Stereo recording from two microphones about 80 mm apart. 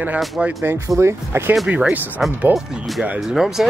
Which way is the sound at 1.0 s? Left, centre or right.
Right.